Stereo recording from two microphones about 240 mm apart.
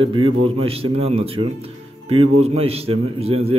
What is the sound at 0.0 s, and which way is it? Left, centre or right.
A man's voice, right.